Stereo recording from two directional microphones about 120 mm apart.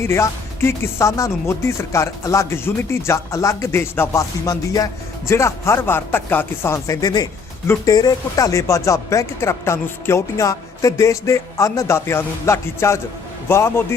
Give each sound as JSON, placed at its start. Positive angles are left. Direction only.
{"t": 0.0, "sound": "speech", "side_deg": 20}